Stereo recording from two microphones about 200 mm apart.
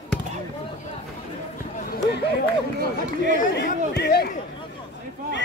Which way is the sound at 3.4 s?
55° left (ahead or behind).